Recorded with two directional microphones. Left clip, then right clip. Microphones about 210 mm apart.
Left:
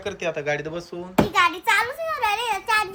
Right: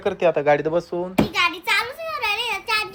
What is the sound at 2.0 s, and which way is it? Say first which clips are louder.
Child singing: left 1 dB; 40° left (ahead or behind).